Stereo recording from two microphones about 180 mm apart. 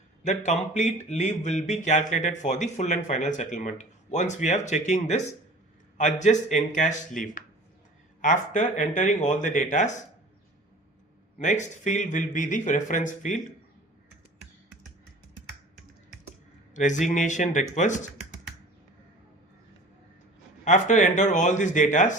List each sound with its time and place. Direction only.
0.3 s speech: 40° left (ahead or behind)
8.2 s speech: 45° left (ahead or behind)
11.3 s speech: 40° left (ahead or behind)
16.7 s speech: 45° left (ahead or behind)
20.7 s speech: 40° left (ahead or behind)